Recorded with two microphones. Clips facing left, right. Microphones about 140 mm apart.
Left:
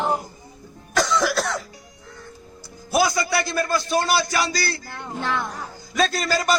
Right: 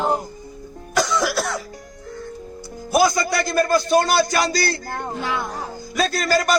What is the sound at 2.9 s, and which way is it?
A man's voice, 45° right (ahead or behind).